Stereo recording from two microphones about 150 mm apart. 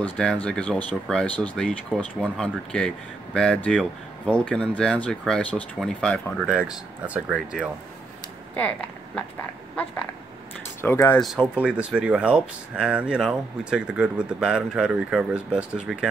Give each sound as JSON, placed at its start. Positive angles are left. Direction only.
{"t": 0.0, "sound": "speech", "side_deg": 5}
{"t": 7.2, "sound": "speech", "side_deg": -5}
{"t": 8.5, "sound": "speech", "side_deg": 10}
{"t": 10.8, "sound": "speech", "side_deg": 15}
{"t": 11.1, "sound": "speech", "side_deg": 0}